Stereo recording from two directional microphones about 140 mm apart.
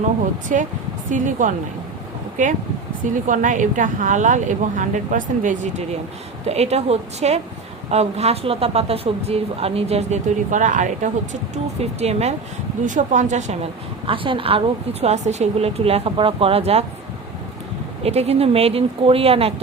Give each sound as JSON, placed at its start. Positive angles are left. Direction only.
{"t": 0.4, "sound": "speech", "side_deg": -65}
{"t": 3.2, "sound": "speech", "side_deg": -65}
{"t": 6.4, "sound": "speech", "side_deg": -50}
{"t": 11.5, "sound": "speech", "side_deg": -50}
{"t": 12.8, "sound": "speech", "side_deg": -65}
{"t": 14.1, "sound": "speech", "side_deg": -40}
{"t": 15.0, "sound": "speech", "side_deg": -55}
{"t": 18.0, "sound": "speech", "side_deg": -50}